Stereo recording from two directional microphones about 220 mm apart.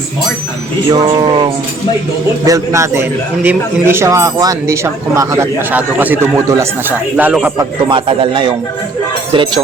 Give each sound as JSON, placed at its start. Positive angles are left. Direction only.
{"t": 0.9, "sound": "speech", "side_deg": -15}
{"t": 7.9, "sound": "speech", "side_deg": -20}